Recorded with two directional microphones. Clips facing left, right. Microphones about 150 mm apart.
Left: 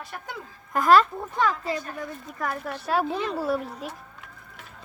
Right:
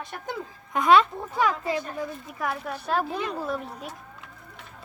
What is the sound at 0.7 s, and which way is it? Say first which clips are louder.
Speech: left 1 dB; centre (ahead or behind).